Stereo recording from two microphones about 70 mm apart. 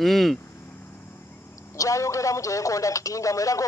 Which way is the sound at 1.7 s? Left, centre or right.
Left.